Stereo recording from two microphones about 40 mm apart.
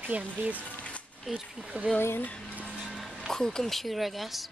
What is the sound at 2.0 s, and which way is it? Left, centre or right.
Speech, left.